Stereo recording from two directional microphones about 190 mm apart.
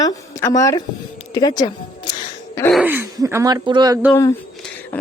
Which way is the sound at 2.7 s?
10° right (ahead or behind).